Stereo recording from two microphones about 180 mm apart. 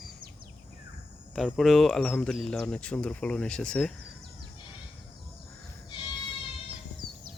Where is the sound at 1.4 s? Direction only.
Centre (ahead or behind).